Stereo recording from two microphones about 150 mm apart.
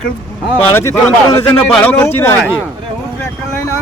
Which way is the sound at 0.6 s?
10° left (ahead or behind).